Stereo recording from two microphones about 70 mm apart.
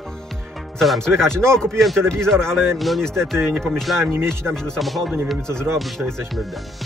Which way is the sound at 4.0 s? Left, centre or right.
Right.